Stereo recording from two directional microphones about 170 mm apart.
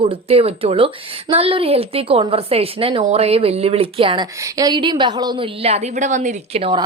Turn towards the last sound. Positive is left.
turn(degrees=-35)  # may be behind; listen again after turning